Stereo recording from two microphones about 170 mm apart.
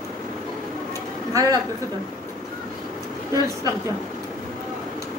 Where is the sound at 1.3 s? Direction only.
20° right (ahead or behind).